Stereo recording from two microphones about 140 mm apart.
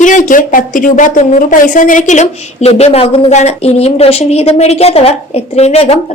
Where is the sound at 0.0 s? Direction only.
65° left (ahead or behind).